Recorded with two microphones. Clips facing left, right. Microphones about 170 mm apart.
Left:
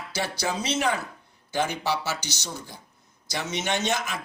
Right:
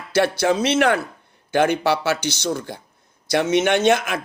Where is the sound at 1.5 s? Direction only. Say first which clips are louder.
Right 8 dB; 60° right (ahead or behind).